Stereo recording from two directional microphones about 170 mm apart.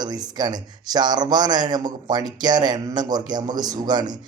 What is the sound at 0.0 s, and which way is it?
A man's voice, 25° right (ahead or behind).